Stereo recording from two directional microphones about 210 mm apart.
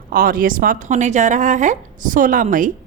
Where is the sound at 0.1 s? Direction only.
45° right (ahead or behind).